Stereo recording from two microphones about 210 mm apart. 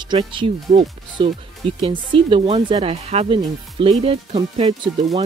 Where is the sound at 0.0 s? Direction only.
20° right (ahead or behind).